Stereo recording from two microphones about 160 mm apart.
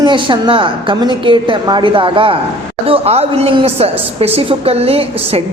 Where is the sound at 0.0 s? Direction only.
30° right (ahead or behind).